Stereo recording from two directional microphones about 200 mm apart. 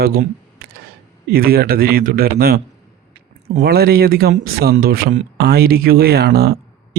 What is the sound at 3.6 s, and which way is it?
A man's voice, 50° right (ahead or behind).